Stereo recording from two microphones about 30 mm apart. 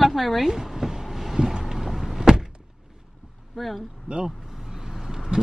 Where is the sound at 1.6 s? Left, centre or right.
Centre.